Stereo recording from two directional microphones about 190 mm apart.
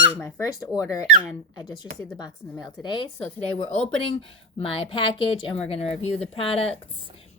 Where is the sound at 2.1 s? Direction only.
20° left (ahead or behind).